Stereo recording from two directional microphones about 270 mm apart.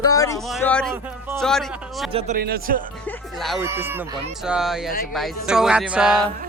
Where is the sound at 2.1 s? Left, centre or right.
Right.